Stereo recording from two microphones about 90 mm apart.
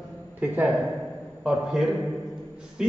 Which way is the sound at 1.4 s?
5° right (ahead or behind).